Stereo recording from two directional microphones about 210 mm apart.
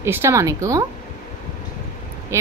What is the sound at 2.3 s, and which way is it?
Speech, 15° right (ahead or behind).